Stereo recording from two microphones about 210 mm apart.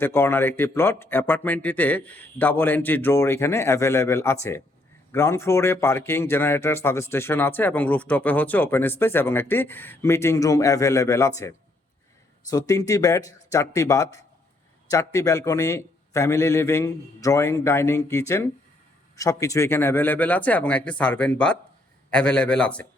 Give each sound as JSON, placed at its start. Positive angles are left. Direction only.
{"t": 0.0, "sound": "a man's voice", "side_deg": 10}